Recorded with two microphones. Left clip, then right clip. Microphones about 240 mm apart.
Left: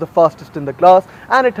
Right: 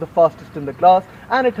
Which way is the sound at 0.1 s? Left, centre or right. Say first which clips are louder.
Left 2 dB; left.